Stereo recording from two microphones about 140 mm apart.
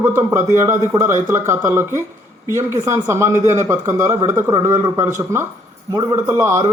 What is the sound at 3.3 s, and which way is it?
Speech, 60° right (ahead or behind).